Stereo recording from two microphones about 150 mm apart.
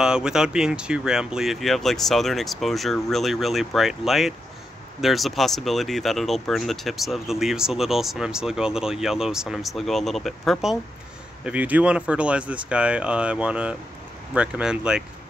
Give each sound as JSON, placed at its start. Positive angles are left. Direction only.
{"t": 0.0, "sound": "speech", "side_deg": -5}